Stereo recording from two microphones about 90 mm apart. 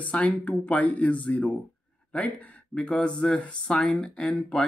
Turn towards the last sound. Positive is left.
turn(degrees=10)  # may be behind; listen again after turning